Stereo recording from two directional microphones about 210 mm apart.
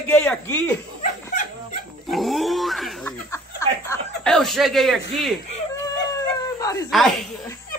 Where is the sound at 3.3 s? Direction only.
15° left (ahead or behind).